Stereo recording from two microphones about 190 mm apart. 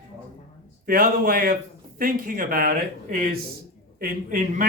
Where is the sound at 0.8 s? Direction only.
50° right (ahead or behind).